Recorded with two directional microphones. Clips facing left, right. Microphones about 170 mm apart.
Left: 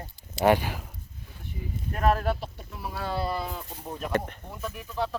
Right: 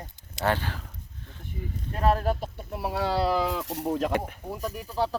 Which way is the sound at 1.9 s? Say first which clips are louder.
Even; 30° right (ahead or behind).